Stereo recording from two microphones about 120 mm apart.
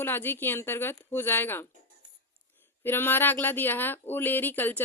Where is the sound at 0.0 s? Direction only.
20° left (ahead or behind).